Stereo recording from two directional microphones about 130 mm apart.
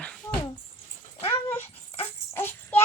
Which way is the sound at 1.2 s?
20° left (ahead or behind).